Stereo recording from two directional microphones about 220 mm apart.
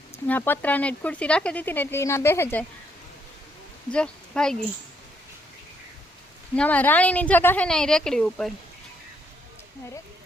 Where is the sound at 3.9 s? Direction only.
5° left (ahead or behind).